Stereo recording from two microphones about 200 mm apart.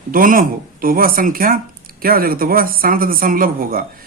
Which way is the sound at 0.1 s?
45° right (ahead or behind).